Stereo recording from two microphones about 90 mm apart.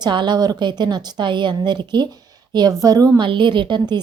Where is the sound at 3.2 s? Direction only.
65° right (ahead or behind).